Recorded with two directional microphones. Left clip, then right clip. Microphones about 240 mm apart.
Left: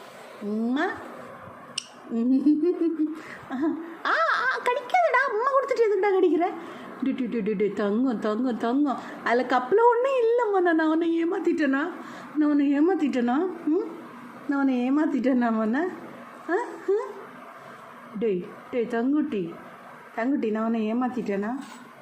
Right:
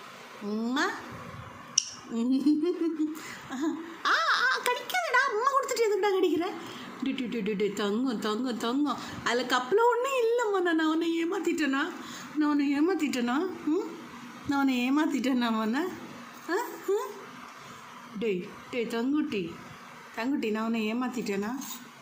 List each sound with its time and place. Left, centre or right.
0.5 s a woman's voice: centre
2.1 s speech: centre
3.5 s a sound: centre
7.0 s speech: centre
14.5 s speech: right
18.2 s speech: centre